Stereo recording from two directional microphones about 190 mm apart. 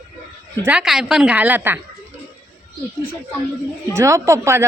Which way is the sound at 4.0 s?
15° right (ahead or behind).